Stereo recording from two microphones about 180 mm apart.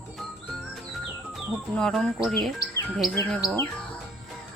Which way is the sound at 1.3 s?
Centre (ahead or behind).